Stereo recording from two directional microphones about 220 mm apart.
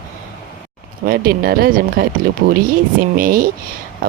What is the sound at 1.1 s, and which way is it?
Speech, 40° right (ahead or behind).